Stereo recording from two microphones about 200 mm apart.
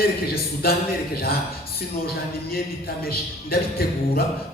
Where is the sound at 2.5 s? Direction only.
50° left (ahead or behind).